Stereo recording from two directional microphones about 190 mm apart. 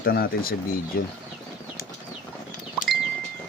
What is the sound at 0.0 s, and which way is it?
Speech, 55° left (ahead or behind).